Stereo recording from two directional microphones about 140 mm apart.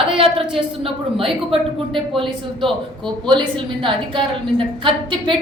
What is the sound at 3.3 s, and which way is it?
A woman's voice, 35° right (ahead or behind).